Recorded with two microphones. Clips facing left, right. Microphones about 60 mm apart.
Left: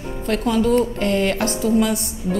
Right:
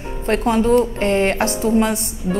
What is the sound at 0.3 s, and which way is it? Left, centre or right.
A woman's voice, right.